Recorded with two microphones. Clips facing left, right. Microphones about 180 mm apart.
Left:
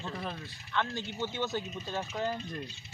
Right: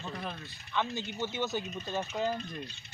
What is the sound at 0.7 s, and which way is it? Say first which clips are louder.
Speech: even; 15° right (ahead or behind).